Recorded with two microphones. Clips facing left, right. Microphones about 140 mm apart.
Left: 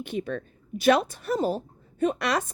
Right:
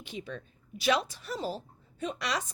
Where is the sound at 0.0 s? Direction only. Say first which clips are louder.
Left 10 dB; 55° left (ahead or behind).